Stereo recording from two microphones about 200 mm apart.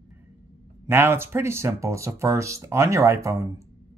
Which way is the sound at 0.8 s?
10° right (ahead or behind).